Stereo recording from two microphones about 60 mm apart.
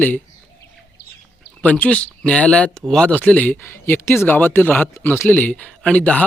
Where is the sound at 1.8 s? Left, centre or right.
Left.